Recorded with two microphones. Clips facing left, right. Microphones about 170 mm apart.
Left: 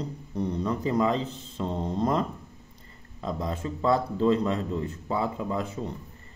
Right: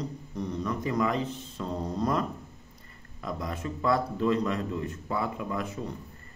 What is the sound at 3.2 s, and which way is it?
A man's voice, 30° left (ahead or behind).